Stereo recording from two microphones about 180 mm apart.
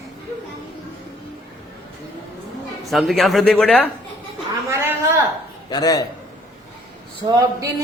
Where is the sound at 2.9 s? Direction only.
Centre (ahead or behind).